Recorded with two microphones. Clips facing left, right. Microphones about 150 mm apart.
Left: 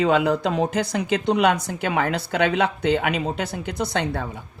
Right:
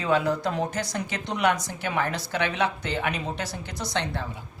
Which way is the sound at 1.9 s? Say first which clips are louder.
Left 4 dB; 60° left (ahead or behind).